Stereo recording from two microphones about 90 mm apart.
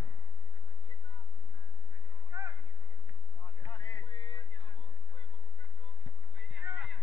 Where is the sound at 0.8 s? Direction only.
60° left (ahead or behind).